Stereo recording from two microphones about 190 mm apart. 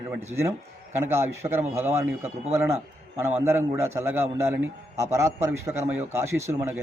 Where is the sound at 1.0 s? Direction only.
15° right (ahead or behind).